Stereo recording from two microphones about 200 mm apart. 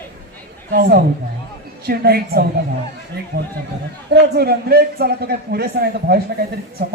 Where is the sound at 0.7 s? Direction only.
50° right (ahead or behind).